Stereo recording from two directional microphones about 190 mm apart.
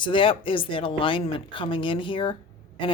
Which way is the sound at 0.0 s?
25° left (ahead or behind).